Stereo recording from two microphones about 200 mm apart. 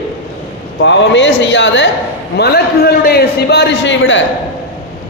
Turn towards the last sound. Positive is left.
turn(degrees=65)  # may be behind; listen again after turning